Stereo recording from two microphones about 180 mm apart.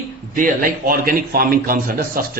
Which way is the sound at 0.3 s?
50° right (ahead or behind).